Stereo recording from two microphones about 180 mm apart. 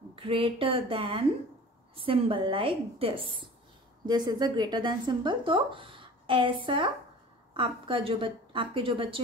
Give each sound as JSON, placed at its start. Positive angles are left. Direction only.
{"t": 0.1, "sound": "speech", "side_deg": -30}